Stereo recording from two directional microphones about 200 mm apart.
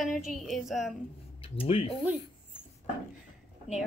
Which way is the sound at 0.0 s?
Centre (ahead or behind).